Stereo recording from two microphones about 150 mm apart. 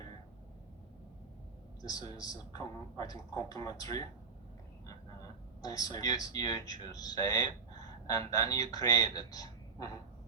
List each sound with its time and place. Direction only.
1.8 s speech: 25° left (ahead or behind)
5.6 s speech: 25° left (ahead or behind)